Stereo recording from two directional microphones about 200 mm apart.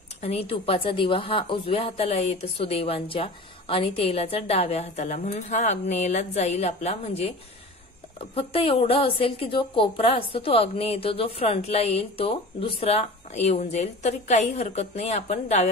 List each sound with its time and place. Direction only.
0.2 s a woman's voice: 30° left (ahead or behind)
8.4 s a woman's voice: 30° left (ahead or behind)